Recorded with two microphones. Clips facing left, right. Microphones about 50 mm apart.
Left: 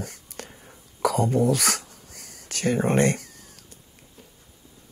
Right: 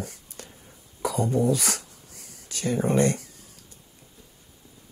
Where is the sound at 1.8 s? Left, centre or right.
Left.